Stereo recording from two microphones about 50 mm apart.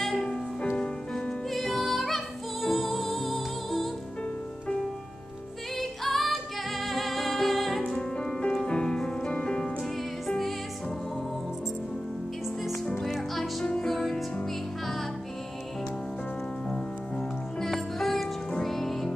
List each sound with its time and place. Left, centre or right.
0.0 s music: centre
1.5 s music: centre
5.8 s music: centre
10.2 s music: centre
13.0 s music: centre
17.6 s music: centre